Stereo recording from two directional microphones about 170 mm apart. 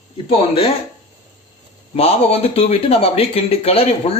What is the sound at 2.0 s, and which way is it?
Speech, 35° left (ahead or behind).